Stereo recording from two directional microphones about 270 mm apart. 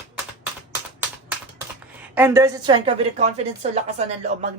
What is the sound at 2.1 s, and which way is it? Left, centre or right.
A woman's voice, centre.